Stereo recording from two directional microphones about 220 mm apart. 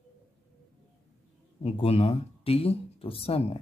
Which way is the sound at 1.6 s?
25° left (ahead or behind).